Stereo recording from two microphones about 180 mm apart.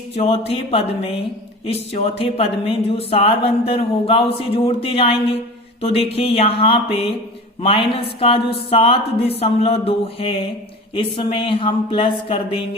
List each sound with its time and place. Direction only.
0.2 s a woman's voice: 30° left (ahead or behind)